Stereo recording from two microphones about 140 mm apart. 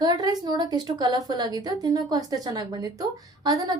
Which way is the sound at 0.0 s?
30° right (ahead or behind).